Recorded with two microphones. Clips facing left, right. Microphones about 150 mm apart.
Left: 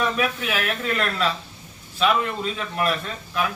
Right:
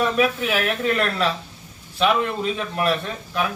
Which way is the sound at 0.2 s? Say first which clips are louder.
Right 4 dB; 30° right (ahead or behind).